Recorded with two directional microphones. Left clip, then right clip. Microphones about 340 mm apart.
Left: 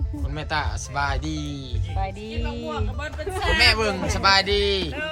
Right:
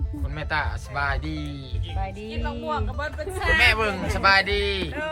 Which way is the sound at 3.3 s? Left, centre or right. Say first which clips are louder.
Even; centre.